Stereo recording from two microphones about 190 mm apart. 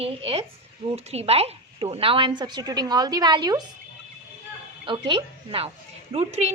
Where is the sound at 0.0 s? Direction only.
30° right (ahead or behind).